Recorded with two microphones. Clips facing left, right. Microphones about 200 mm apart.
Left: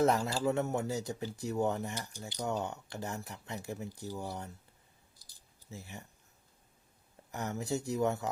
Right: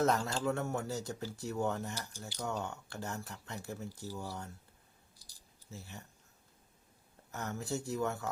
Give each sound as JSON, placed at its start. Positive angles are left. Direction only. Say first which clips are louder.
{"t": 0.0, "sound": "speech", "louder": "left 3 dB", "side_deg": 10}
{"t": 0.4, "sound": "speech", "louder": "left 3 dB", "side_deg": 20}
{"t": 5.7, "sound": "speech", "louder": "left 2 dB", "side_deg": 15}
{"t": 7.3, "sound": "speech", "louder": "left 3 dB", "side_deg": 15}